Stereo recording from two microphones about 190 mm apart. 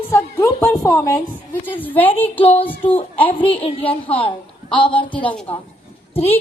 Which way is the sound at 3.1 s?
30° left (ahead or behind).